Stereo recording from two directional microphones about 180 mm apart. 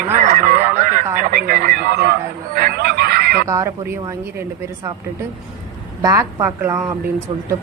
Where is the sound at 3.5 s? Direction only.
15° right (ahead or behind).